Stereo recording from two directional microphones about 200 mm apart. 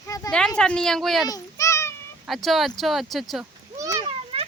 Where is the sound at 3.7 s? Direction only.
15° right (ahead or behind).